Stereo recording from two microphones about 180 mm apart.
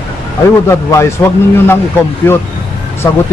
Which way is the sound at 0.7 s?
15° left (ahead or behind).